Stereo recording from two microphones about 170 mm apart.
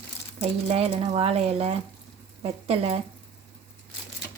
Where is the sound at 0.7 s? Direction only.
35° right (ahead or behind).